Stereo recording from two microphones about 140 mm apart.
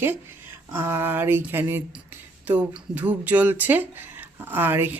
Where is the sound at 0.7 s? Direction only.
20° right (ahead or behind).